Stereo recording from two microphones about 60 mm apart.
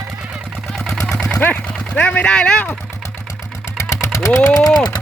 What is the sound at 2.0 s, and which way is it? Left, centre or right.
Speech, left.